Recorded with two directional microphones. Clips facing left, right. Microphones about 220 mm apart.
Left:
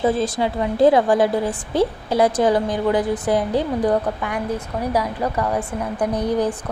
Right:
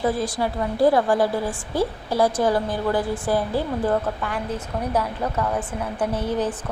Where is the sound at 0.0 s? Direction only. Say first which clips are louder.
Left 4 dB; 20° left (ahead or behind).